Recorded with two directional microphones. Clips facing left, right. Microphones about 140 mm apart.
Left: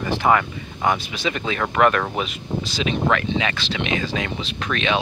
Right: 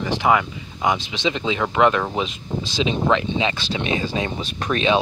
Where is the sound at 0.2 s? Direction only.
15° right (ahead or behind).